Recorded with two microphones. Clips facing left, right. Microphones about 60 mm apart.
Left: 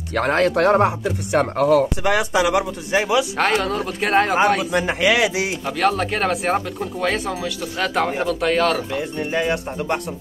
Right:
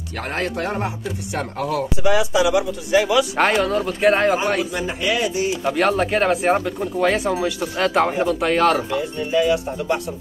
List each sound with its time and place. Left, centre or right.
0.1 s speech: left
2.0 s speech: left
2.9 s speech: left
3.3 s speech: centre
4.7 s speech: left
5.6 s speech: centre
9.3 s speech: left